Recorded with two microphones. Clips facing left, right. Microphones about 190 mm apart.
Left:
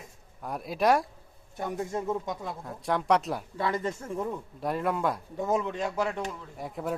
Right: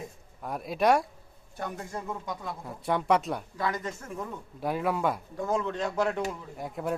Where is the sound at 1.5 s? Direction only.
20° left (ahead or behind).